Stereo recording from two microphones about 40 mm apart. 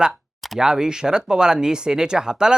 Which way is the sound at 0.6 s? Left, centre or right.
Centre.